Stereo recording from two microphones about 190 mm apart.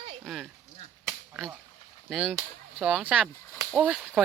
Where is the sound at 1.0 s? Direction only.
Centre (ahead or behind).